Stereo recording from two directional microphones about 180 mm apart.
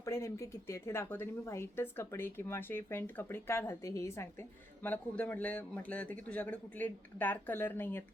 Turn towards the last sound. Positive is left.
turn(degrees=10)  # may be behind; listen again after turning